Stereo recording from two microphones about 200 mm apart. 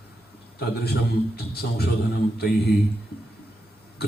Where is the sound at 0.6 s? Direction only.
55° left (ahead or behind).